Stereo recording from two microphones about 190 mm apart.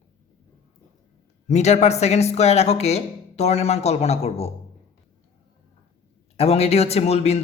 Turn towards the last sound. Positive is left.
turn(degrees=35)  # may be behind; listen again after turning